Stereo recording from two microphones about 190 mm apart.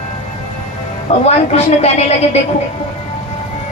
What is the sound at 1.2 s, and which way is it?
A woman's voice, 35° left (ahead or behind).